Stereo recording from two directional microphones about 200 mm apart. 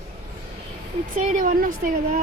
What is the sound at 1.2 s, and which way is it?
A woman's voice, 40° right (ahead or behind).